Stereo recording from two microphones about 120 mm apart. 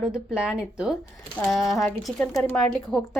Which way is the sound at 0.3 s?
5° right (ahead or behind).